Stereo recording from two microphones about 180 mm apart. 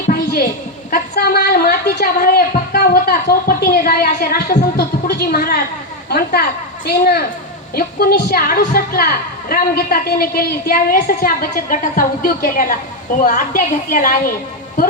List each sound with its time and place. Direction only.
0.9 s a woman's voice: 60° left (ahead or behind)